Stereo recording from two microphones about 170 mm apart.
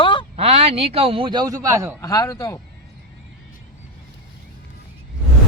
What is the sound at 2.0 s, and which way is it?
Speech, 20° left (ahead or behind).